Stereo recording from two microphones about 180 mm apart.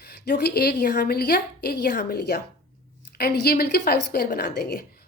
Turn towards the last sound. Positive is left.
turn(degrees=60)  # may be behind; listen again after turning